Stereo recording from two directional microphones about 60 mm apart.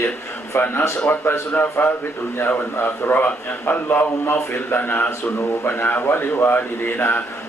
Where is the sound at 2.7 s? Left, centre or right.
Left.